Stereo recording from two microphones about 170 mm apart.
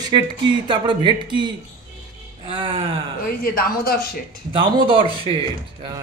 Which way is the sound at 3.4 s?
60° left (ahead or behind).